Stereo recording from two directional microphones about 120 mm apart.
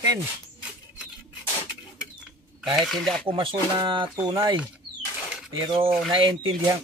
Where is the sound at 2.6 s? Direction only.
5° left (ahead or behind).